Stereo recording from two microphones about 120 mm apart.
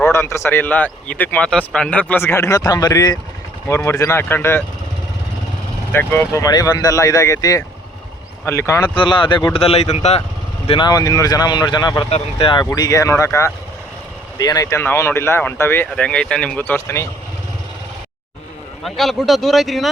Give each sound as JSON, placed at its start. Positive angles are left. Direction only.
{"t": 0.0, "sound": "speech", "side_deg": 20}
{"t": 3.8, "sound": "speech", "side_deg": 25}
{"t": 5.9, "sound": "speech", "side_deg": 20}
{"t": 9.0, "sound": "speech", "side_deg": 45}
{"t": 10.7, "sound": "speech", "side_deg": 40}
{"t": 12.0, "sound": "speech", "side_deg": 50}
{"t": 12.7, "sound": "speech", "side_deg": 30}
{"t": 15.9, "sound": "speech", "side_deg": 10}
{"t": 18.9, "sound": "speech", "side_deg": 0}